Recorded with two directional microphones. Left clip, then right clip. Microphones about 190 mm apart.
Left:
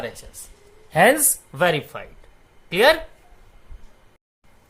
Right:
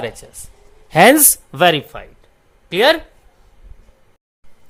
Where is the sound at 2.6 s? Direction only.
30° right (ahead or behind).